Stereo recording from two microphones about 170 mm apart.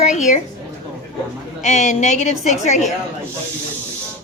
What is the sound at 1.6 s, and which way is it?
A woman's voice, 45° left (ahead or behind).